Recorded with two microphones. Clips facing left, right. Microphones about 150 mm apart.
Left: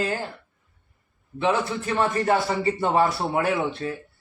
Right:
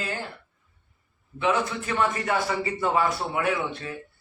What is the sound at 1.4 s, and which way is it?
A man's voice, 35° left (ahead or behind).